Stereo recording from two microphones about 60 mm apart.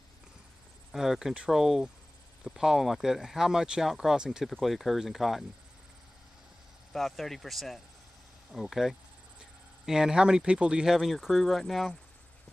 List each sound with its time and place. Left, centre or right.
0.9 s speech: centre
4.5 s speech: centre
6.9 s speech: centre
11.0 s speech: centre